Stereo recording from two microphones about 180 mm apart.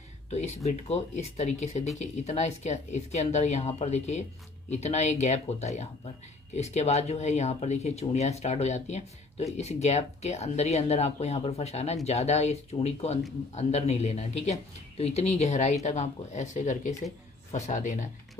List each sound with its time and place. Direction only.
0.7 s speech: 40° left (ahead or behind)